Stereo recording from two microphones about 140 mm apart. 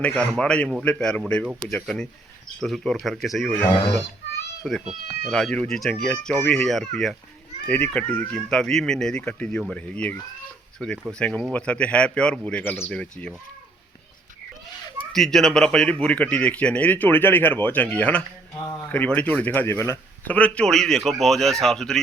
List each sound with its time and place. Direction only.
0.0 s speech: 5° left (ahead or behind)
4.6 s speech: centre (ahead or behind)
15.1 s speech: centre (ahead or behind)